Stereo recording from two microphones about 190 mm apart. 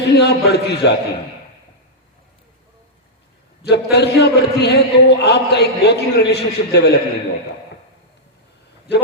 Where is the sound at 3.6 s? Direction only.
60° left (ahead or behind).